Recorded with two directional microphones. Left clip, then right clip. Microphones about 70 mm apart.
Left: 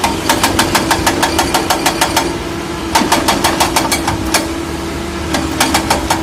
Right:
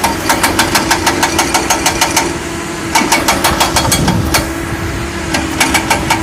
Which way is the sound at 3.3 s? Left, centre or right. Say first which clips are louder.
Right 1 dB; centre.